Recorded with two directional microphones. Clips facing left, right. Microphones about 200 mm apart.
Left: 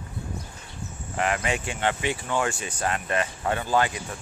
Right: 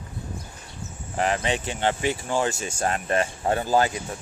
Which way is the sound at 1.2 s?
30° right (ahead or behind).